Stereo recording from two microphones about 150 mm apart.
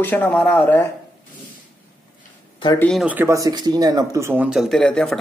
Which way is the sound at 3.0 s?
10° right (ahead or behind).